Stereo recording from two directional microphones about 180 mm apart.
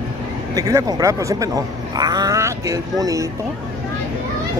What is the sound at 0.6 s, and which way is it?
Speech, 20° right (ahead or behind).